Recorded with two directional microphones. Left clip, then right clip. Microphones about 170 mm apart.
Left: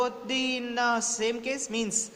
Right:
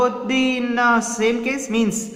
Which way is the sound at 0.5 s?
35° left (ahead or behind).